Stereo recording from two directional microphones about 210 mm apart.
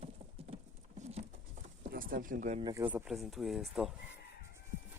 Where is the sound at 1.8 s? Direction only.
40° right (ahead or behind).